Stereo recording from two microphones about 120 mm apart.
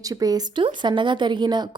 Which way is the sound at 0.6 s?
40° right (ahead or behind).